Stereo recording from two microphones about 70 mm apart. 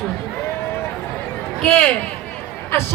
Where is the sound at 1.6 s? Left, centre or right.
Centre.